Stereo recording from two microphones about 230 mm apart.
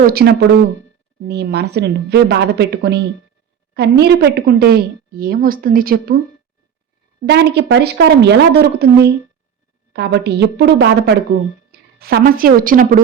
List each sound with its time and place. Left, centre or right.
0.0 s a woman's voice: right
7.3 s a woman's voice: right